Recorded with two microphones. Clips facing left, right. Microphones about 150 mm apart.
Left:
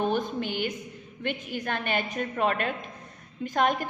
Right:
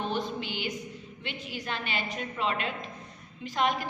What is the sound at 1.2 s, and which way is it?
A woman's voice, 50° left (ahead or behind).